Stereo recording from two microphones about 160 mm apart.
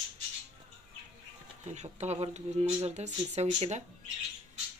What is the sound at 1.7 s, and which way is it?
Speech, 45° right (ahead or behind).